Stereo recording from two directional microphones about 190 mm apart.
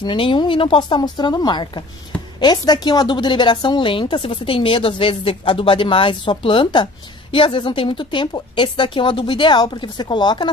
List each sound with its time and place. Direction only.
0.0 s a woman's voice: 25° left (ahead or behind)